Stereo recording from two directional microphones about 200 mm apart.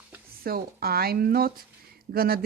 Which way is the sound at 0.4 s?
50° right (ahead or behind).